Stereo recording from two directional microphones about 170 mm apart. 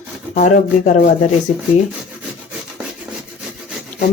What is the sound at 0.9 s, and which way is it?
Speech, 55° left (ahead or behind).